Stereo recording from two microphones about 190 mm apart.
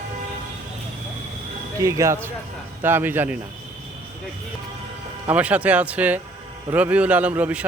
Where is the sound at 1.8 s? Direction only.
15° right (ahead or behind).